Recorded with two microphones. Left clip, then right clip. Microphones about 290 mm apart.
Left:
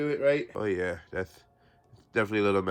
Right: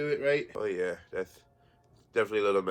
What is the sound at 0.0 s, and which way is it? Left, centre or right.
Speech, left.